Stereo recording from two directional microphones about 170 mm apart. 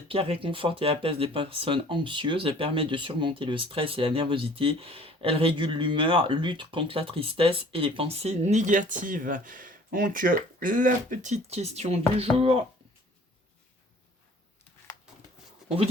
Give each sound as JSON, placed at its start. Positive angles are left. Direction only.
{"t": 0.1, "sound": "speech", "side_deg": -35}